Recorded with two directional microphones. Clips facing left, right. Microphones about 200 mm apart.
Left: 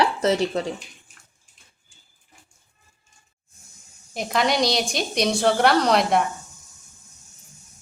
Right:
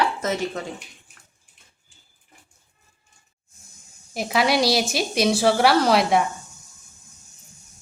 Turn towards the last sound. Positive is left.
turn(degrees=-5)  # may be behind; listen again after turning